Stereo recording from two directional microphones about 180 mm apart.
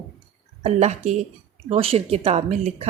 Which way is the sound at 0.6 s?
40° right (ahead or behind).